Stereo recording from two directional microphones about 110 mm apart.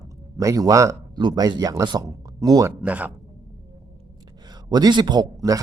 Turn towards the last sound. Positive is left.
turn(degrees=-35)  # may be behind; listen again after turning